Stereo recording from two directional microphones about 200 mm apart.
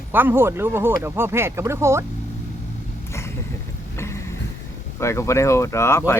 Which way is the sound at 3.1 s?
15° left (ahead or behind).